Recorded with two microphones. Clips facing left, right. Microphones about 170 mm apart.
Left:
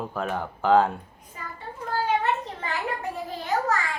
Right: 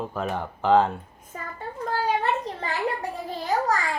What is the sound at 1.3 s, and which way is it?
Child singing, 50° right (ahead or behind).